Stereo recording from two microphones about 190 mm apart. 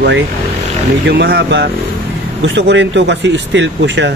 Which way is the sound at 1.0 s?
60° right (ahead or behind).